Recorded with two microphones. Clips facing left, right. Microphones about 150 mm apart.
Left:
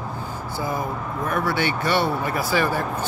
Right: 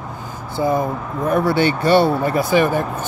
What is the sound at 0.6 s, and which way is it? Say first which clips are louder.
Speech: right 9 dB; 25° right (ahead or behind).